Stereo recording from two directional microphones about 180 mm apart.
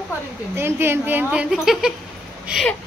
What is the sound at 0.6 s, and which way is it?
A woman's voice, 10° right (ahead or behind).